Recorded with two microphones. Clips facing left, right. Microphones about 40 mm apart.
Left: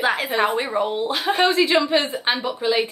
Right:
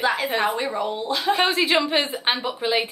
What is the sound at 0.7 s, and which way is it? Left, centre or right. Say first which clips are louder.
Speech: left 3 dB; left.